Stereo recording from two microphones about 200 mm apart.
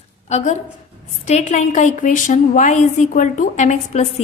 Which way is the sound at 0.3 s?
35° left (ahead or behind).